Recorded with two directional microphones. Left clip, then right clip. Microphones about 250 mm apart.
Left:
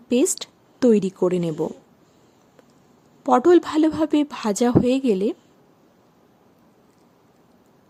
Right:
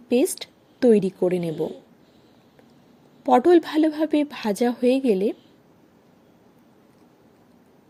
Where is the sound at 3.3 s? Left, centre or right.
Centre.